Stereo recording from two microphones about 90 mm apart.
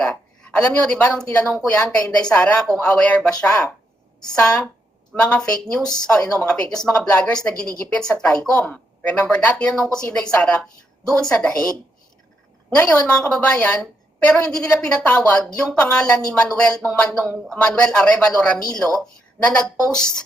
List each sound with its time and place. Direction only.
0.0 s a woman's voice: 10° left (ahead or behind)
5.8 s speech: 45° left (ahead or behind)
6.6 s speech: 10° left (ahead or behind)
12.7 s speech: 15° left (ahead or behind)